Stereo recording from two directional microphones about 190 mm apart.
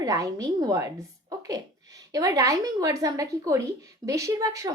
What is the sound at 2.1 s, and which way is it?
A woman's voice, 20° right (ahead or behind).